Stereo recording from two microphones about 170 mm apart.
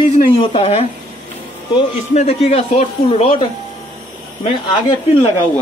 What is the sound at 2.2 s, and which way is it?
A man's voice, 35° left (ahead or behind).